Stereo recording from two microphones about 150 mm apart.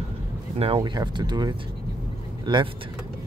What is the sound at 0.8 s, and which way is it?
Speech, 30° right (ahead or behind).